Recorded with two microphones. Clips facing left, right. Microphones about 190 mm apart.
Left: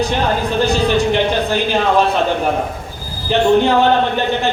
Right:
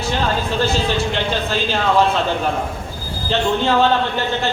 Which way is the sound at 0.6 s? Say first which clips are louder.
Left 5 dB; 15° left (ahead or behind).